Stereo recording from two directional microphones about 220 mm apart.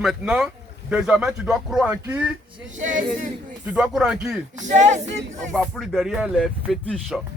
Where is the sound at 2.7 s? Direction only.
35° right (ahead or behind).